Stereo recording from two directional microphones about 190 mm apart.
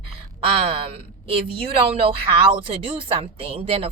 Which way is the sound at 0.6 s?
30° right (ahead or behind).